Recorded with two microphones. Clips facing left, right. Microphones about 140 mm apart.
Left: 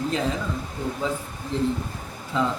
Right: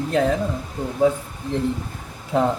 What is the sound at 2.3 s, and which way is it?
Speech, 55° right (ahead or behind).